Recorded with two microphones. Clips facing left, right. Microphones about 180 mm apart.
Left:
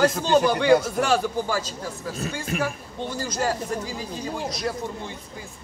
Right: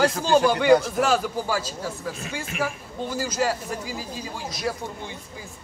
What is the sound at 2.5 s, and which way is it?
Speech, 45° left (ahead or behind).